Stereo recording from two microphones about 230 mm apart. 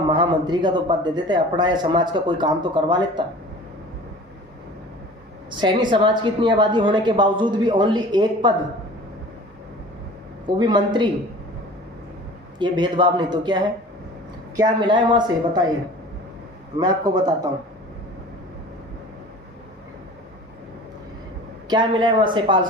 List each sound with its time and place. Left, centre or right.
0.1 s speech: centre
5.5 s speech: centre
10.4 s speech: centre
12.5 s speech: centre
16.7 s speech: centre
21.7 s speech: right